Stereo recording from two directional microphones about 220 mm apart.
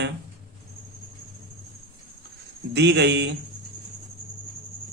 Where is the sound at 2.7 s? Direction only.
50° right (ahead or behind).